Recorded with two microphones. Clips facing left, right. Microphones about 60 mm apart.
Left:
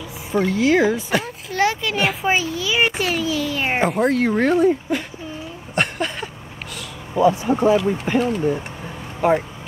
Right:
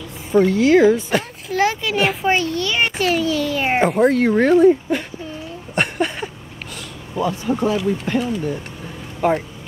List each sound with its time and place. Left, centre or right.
0.3 s speech: centre
5.8 s a sound: centre
7.4 s speech: left
9.2 s speech: centre